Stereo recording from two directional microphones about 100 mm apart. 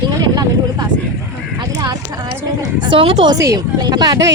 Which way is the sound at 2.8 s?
60° right (ahead or behind).